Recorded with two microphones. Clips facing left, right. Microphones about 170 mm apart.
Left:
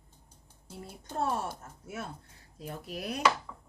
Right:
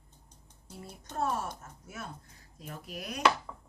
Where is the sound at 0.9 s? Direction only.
30° left (ahead or behind).